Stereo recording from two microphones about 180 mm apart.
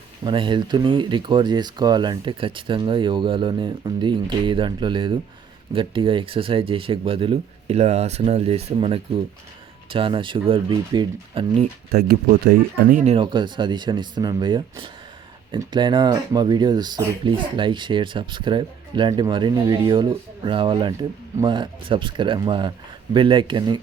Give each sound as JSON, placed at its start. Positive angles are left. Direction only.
{"t": 0.3, "sound": "speech", "side_deg": -25}
{"t": 11.9, "sound": "speech", "side_deg": -60}
{"t": 13.1, "sound": "speech", "side_deg": -25}